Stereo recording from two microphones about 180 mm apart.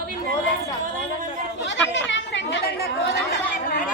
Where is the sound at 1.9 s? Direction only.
90° left; by 3.2 s 70° left (ahead or behind).